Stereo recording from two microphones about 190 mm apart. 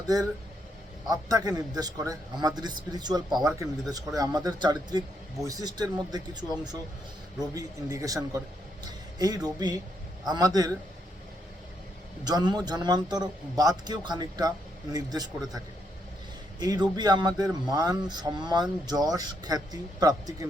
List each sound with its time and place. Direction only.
1.0 s speech: 20° right (ahead or behind)
7.5 s speech: 15° right (ahead or behind)
12.2 s speech: 20° right (ahead or behind)
16.6 s speech: 20° right (ahead or behind)